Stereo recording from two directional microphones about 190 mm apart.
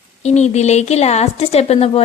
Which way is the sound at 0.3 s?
35° left (ahead or behind).